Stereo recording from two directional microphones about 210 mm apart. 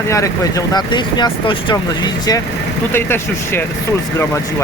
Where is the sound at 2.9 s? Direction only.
10° left (ahead or behind).